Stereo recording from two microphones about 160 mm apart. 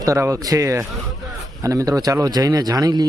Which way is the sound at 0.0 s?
20° right (ahead or behind).